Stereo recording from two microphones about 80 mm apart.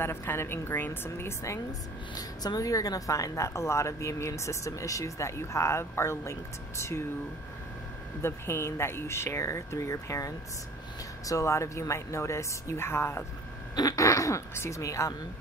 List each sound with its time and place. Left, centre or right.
0.0 s a woman's voice: left
8.2 s a woman's voice: left
13.7 s speech: left